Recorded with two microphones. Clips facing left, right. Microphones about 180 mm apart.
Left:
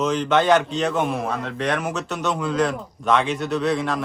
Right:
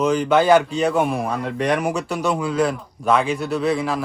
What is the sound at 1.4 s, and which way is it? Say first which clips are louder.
Speech: right 4 dB; 10° right (ahead or behind).